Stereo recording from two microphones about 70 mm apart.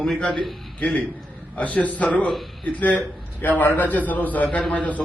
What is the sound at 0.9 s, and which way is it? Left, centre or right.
A man's voice, left.